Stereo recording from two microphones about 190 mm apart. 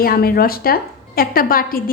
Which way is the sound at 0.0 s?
50° left (ahead or behind).